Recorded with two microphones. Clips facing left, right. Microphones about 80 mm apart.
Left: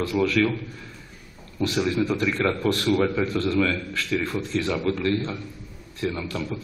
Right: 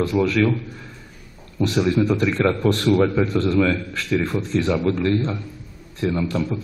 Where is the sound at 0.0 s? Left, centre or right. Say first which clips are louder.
Right 3 dB; right.